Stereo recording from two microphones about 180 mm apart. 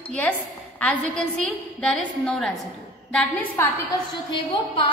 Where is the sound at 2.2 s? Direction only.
5° left (ahead or behind).